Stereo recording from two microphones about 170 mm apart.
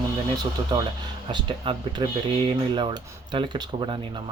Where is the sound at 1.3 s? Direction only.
25° right (ahead or behind).